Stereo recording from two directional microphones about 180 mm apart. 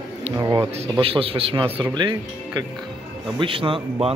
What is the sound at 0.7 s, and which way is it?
Speech, 35° right (ahead or behind).